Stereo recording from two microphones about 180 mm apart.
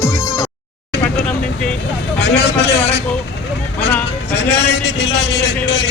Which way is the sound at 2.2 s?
70° left (ahead or behind).